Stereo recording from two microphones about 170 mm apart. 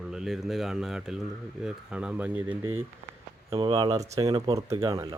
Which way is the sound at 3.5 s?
30° right (ahead or behind).